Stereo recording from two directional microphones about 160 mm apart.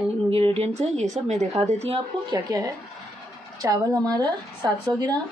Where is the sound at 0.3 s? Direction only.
35° right (ahead or behind).